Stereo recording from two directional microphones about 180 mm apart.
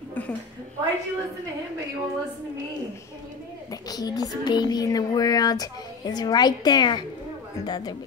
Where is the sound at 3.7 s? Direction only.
20° left (ahead or behind).